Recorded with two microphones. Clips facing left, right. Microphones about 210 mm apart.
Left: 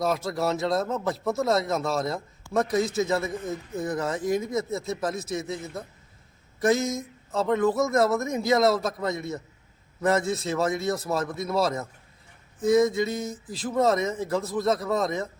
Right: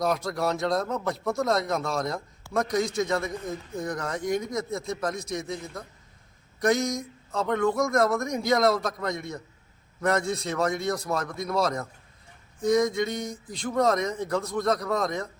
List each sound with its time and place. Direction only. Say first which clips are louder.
0.0 s speech: left 1 dB; centre (ahead or behind)